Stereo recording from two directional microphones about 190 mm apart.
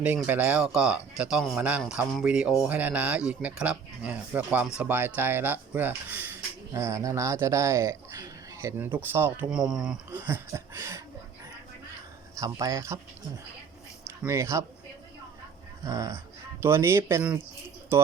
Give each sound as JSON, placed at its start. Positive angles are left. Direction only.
{"t": 0.0, "sound": "speech", "side_deg": -10}
{"t": 12.4, "sound": "speech", "side_deg": -15}
{"t": 14.3, "sound": "speech", "side_deg": -15}
{"t": 15.9, "sound": "speech", "side_deg": -15}